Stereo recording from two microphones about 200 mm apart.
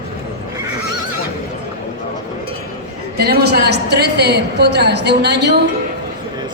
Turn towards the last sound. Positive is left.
turn(degrees=-55)  # may be behind; listen again after turning